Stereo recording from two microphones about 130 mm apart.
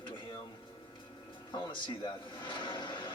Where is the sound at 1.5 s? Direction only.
40° left (ahead or behind).